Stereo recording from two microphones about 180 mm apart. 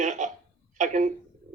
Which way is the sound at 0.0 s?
40° right (ahead or behind).